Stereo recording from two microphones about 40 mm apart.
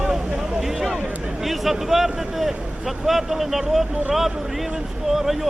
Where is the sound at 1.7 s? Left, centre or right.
Centre.